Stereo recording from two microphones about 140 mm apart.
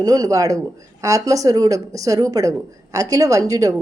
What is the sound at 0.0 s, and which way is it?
Speech, 25° right (ahead or behind).